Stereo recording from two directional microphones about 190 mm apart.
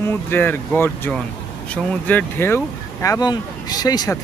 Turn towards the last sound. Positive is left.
turn(degrees=20)  # may be behind; listen again after turning